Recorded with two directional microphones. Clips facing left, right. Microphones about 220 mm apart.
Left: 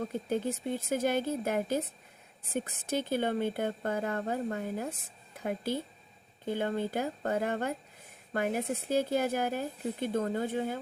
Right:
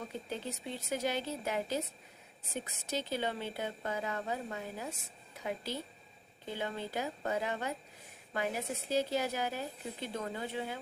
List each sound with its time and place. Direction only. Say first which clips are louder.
0.1 s speech: left 8 dB; 50° left (ahead or behind)